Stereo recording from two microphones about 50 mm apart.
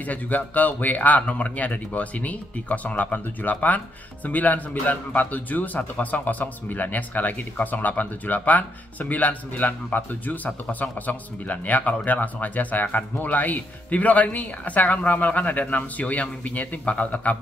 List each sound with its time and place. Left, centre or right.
0.0 s speech: left